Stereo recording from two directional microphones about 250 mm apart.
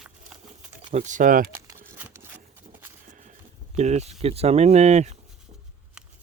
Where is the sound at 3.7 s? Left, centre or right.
Right.